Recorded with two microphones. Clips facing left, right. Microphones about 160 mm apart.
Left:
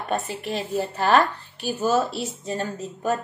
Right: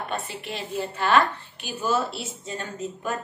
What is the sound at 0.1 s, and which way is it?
A woman's voice, 40° left (ahead or behind).